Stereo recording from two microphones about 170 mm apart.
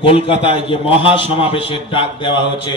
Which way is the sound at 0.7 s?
30° left (ahead or behind).